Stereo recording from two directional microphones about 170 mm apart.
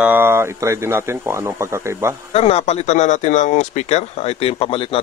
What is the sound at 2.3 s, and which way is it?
Speech, 35° left (ahead or behind).